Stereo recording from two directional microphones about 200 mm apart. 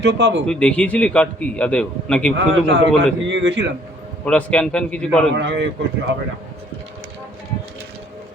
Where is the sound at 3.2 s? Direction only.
65° right (ahead or behind).